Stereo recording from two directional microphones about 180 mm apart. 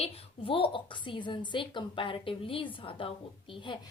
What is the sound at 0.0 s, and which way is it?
A woman's voice, 30° left (ahead or behind).